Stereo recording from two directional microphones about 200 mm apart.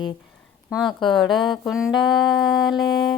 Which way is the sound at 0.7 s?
Centre (ahead or behind).